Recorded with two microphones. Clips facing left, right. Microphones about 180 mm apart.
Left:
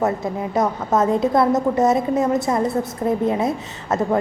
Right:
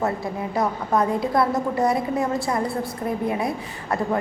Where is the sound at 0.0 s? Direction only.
20° left (ahead or behind).